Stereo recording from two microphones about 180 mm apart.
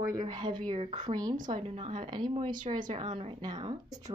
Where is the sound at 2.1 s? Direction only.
25° right (ahead or behind).